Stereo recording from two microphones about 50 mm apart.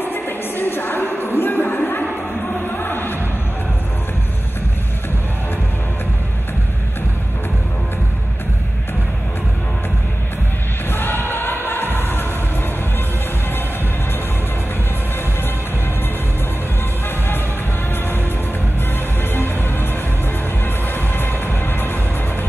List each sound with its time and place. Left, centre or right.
0.0 s a sound: left
2.7 s music: left
10.9 s music: left
19.3 s music: left
20.9 s music: left